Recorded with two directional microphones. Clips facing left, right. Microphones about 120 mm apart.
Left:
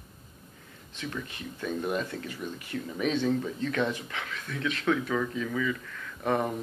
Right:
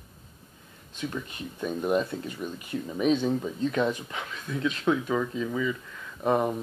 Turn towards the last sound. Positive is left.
turn(degrees=-20)  # may be behind; listen again after turning